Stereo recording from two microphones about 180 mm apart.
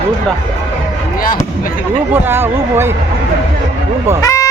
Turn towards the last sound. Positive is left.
turn(degrees=20)  # may be behind; listen again after turning